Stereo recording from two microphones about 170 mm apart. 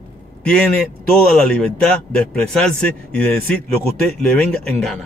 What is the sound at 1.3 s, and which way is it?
Speech, 5° left (ahead or behind).